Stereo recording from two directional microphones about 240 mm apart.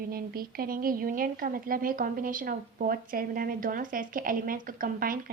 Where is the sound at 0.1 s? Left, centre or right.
Right.